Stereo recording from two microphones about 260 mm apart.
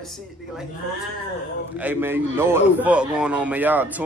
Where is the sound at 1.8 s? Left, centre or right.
Centre.